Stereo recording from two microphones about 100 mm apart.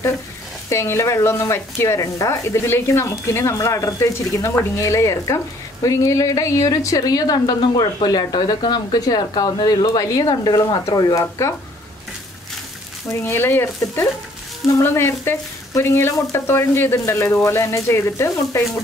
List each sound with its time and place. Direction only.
0.7 s a woman's voice: 30° left (ahead or behind)
13.1 s speech: 25° left (ahead or behind)